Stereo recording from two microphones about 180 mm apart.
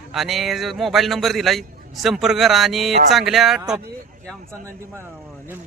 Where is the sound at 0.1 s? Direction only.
Centre (ahead or behind).